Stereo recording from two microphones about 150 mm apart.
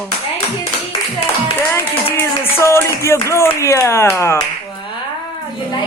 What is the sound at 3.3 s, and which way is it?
Speech, 20° left (ahead or behind).